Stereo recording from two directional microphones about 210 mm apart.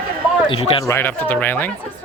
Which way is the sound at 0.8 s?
10° left (ahead or behind).